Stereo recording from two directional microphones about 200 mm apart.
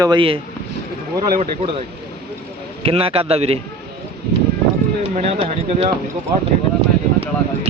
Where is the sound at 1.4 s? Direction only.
30° right (ahead or behind).